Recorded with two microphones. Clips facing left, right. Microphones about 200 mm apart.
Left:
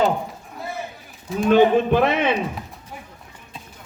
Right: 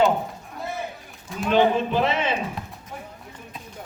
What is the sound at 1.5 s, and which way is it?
Speech, 50° left (ahead or behind).